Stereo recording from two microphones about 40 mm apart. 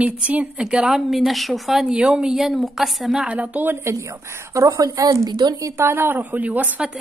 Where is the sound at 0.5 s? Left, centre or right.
Right.